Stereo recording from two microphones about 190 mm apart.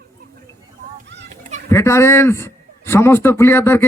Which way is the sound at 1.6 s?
15° left (ahead or behind).